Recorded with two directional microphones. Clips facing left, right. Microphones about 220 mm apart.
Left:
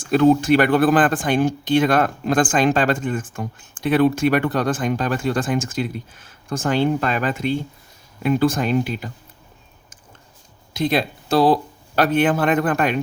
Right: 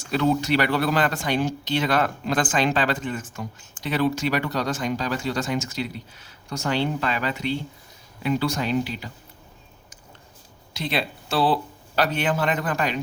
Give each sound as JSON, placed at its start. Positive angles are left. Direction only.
{"t": 0.0, "sound": "speech", "side_deg": 50}
{"t": 10.8, "sound": "speech", "side_deg": 45}